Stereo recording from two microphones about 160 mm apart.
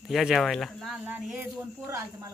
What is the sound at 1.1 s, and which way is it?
Speech, 10° right (ahead or behind).